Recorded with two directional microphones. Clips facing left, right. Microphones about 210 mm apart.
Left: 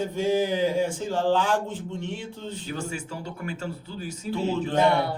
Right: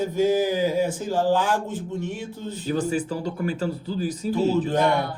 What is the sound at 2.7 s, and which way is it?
Speech, 35° right (ahead or behind).